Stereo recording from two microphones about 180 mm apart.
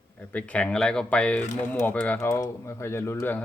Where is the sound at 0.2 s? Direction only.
5° left (ahead or behind).